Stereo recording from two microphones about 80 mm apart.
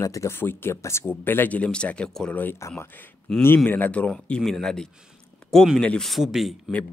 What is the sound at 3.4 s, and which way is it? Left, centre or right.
Speech, left.